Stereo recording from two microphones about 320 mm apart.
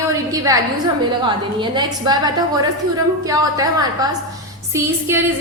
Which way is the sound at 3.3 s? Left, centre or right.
Centre.